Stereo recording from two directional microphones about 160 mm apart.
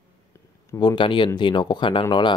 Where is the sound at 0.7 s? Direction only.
25° left (ahead or behind).